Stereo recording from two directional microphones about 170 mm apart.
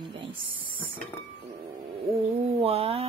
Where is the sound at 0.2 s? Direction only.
30° right (ahead or behind).